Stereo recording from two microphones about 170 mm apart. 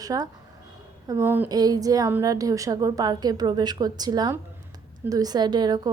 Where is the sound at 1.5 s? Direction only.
20° right (ahead or behind).